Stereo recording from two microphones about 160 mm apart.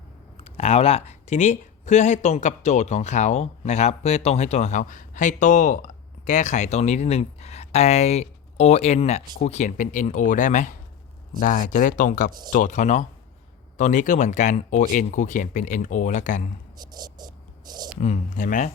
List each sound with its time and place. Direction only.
0.3 s speech: 40° left (ahead or behind)
16.9 s a sound: 25° right (ahead or behind)
18.0 s speech: 50° left (ahead or behind)